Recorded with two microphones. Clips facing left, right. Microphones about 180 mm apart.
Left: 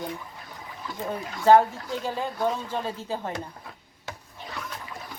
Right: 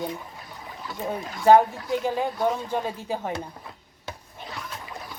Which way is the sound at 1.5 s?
15° right (ahead or behind).